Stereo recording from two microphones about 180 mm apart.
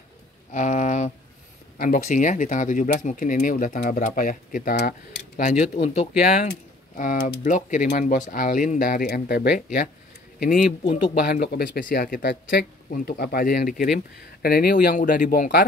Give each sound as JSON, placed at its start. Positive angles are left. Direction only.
{"t": 0.5, "sound": "a sound", "side_deg": 45}
{"t": 1.8, "sound": "speech", "side_deg": 45}
{"t": 5.4, "sound": "speech", "side_deg": 40}
{"t": 6.2, "sound": "speech", "side_deg": 60}
{"t": 15.0, "sound": "speech", "side_deg": 45}